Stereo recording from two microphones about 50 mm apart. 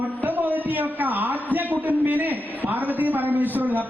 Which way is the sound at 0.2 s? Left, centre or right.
Right.